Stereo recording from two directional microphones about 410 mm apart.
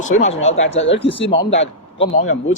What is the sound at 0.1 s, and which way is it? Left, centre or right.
Speech, left.